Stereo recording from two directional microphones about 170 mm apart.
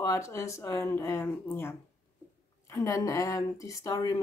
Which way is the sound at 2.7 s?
20° left (ahead or behind).